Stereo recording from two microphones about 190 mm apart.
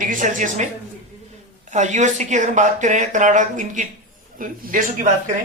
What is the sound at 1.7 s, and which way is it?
A woman's voice, 40° right (ahead or behind).